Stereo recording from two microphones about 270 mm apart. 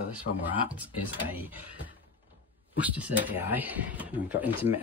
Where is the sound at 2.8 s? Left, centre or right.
Centre.